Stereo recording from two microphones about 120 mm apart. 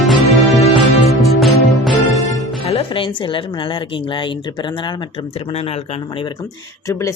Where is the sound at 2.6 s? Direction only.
50° left (ahead or behind).